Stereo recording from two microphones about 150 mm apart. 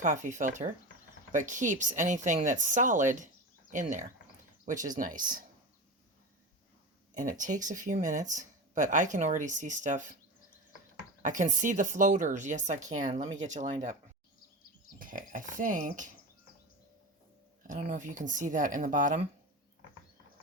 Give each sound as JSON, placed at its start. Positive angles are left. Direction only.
{"t": 0.0, "sound": "speech", "side_deg": -55}
{"t": 7.1, "sound": "speech", "side_deg": -60}
{"t": 11.2, "sound": "speech", "side_deg": -55}
{"t": 14.9, "sound": "speech", "side_deg": -65}
{"t": 17.7, "sound": "speech", "side_deg": -55}